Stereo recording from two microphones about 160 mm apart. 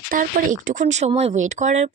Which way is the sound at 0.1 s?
60° right (ahead or behind).